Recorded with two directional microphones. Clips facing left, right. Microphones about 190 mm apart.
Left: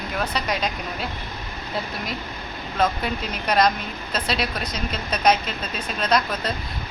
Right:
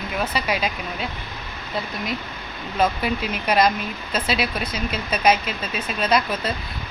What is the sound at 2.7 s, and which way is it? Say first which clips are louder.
Speech: right 2 dB; 5° right (ahead or behind).